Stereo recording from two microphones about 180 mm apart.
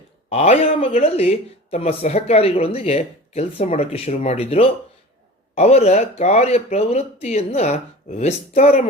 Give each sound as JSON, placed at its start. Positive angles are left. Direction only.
{"t": 0.3, "sound": "speech", "side_deg": 35}